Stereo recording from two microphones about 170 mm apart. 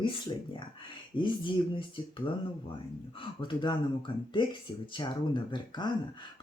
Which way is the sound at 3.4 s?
30° left (ahead or behind).